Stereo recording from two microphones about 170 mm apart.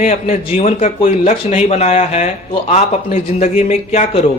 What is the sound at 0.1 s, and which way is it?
Speech, 40° left (ahead or behind).